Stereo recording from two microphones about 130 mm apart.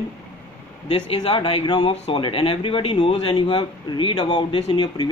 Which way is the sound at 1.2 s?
45° left (ahead or behind).